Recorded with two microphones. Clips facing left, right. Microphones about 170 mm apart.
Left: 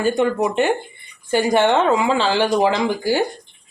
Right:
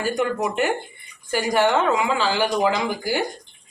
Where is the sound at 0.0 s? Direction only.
25° left (ahead or behind).